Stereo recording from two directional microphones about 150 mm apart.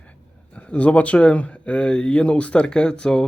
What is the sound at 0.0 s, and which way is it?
Speech, 10° left (ahead or behind).